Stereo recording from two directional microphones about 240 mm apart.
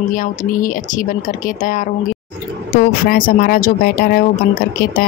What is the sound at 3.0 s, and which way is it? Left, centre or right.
Speech, left.